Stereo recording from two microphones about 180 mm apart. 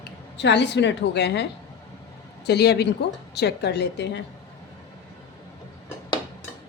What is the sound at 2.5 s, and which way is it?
A woman's voice, 65° left (ahead or behind).